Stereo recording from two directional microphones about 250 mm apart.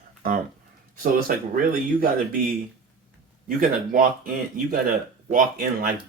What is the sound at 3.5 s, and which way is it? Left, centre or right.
Speech, right.